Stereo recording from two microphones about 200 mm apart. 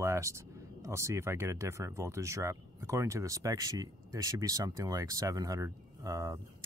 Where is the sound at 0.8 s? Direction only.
15° right (ahead or behind).